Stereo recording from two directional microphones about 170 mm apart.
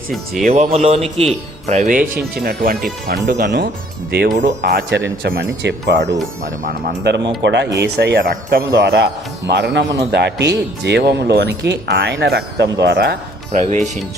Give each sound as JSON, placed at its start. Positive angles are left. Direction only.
{"t": 0.4, "sound": "speech", "side_deg": -45}
{"t": 3.2, "sound": "speech", "side_deg": -80}
{"t": 4.4, "sound": "speech", "side_deg": -70}
{"t": 6.4, "sound": "speech", "side_deg": -55}
{"t": 7.4, "sound": "speech", "side_deg": -90}
{"t": 7.8, "sound": "speech", "side_deg": -70}
{"t": 13.5, "sound": "speech", "side_deg": -45}